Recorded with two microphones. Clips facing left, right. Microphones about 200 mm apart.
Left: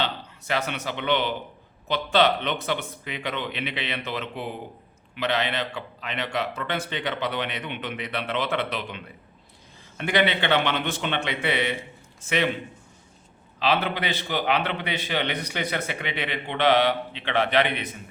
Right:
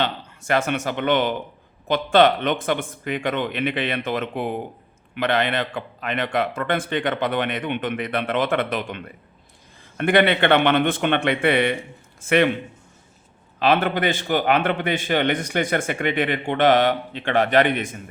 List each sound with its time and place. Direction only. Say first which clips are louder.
0.0 s a man's voice: right 4 dB; 50° right (ahead or behind)
13.6 s a man's voice: right 5 dB; 50° right (ahead or behind)